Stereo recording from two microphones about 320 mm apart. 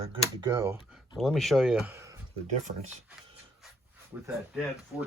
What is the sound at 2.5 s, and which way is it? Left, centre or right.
Speech, right.